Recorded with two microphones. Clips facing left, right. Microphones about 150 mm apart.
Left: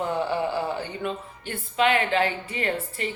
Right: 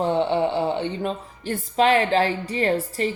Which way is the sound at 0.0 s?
25° right (ahead or behind).